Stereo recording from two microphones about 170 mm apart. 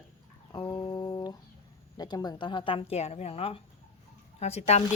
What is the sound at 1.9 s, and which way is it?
A woman's voice, 25° left (ahead or behind).